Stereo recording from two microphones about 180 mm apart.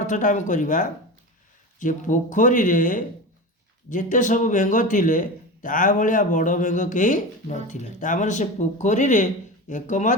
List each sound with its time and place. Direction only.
0.0 s speech: 45° left (ahead or behind)